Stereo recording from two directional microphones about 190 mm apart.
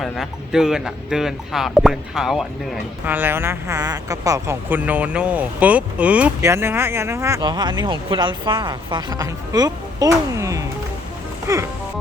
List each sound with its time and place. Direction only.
0.0 s speech: centre (ahead or behind)